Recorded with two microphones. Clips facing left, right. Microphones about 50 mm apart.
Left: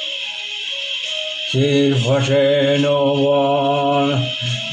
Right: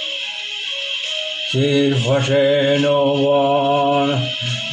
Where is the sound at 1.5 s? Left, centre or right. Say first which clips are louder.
Left 1 dB; centre.